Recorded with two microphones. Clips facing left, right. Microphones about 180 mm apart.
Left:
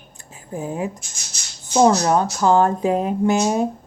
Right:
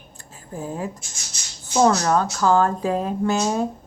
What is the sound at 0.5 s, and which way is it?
Speech, 15° left (ahead or behind).